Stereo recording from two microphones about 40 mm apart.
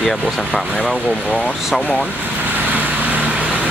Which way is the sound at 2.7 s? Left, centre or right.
Right.